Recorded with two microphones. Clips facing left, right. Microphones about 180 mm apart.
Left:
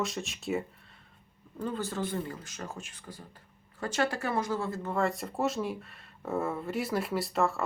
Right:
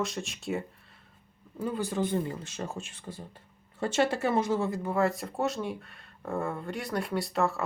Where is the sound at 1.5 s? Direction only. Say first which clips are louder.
Right 3 dB; 10° right (ahead or behind).